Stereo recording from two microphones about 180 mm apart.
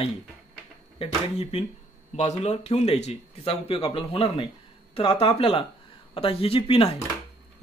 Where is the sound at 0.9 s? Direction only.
35° left (ahead or behind).